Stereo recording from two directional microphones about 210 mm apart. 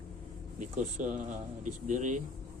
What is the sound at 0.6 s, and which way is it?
Speech, 35° right (ahead or behind).